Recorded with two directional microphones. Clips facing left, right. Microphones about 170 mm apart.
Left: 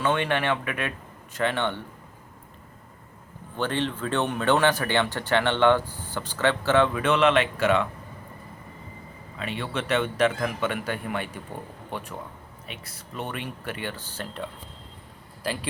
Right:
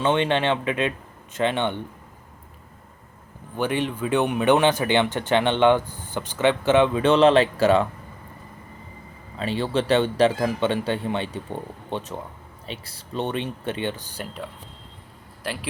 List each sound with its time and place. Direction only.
0.0 s speech: 20° right (ahead or behind)
3.6 s speech: 10° right (ahead or behind)
7.0 s speech: 30° right (ahead or behind)
9.4 s speech: 30° right (ahead or behind); by 14.3 s 15° right (ahead or behind)